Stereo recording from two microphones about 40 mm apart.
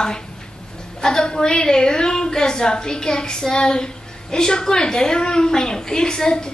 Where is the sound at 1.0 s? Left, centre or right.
Centre.